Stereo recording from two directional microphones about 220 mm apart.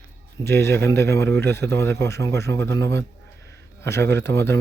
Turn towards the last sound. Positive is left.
turn(degrees=10)  # may be behind; listen again after turning